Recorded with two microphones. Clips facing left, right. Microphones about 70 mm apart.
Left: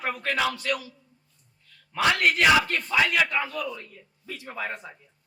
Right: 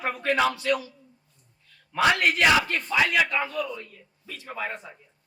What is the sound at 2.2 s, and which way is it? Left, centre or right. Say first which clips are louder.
Speech: left 1 dB; right.